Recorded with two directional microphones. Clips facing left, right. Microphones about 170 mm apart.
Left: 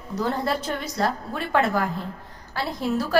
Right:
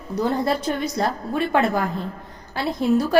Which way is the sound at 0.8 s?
20° right (ahead or behind).